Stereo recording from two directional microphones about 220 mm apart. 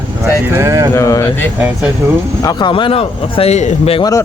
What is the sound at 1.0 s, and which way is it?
Speech, 15° left (ahead or behind).